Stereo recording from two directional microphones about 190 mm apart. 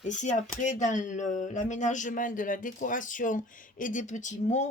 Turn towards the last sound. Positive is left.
turn(degrees=40)  # may be behind; listen again after turning